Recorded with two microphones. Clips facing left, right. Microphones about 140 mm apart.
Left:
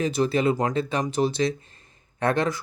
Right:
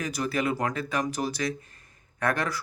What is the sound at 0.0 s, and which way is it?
Speech, 25° left (ahead or behind).